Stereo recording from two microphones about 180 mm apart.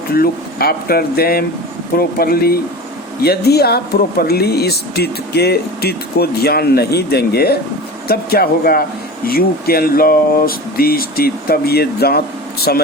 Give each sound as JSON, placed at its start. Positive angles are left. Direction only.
{"t": 0.1, "sound": "speech", "side_deg": 55}